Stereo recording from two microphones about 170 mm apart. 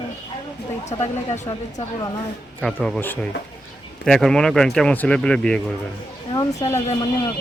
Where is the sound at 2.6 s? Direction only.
5° left (ahead or behind).